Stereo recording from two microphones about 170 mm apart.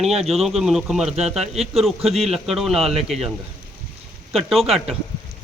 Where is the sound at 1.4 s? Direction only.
40° right (ahead or behind).